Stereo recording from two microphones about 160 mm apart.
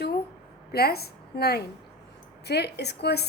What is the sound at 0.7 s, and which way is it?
A woman's voice, 75° left (ahead or behind).